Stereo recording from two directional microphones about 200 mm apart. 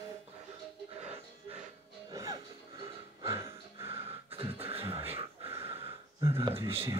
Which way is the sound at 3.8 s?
30° right (ahead or behind).